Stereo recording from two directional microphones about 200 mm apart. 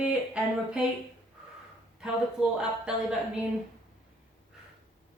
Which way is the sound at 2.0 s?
5° right (ahead or behind).